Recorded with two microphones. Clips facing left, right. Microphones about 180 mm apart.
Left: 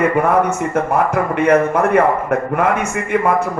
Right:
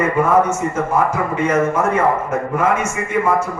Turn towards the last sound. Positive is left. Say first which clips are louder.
# left 2 dB
turn(degrees=60)  # may be behind; listen again after turning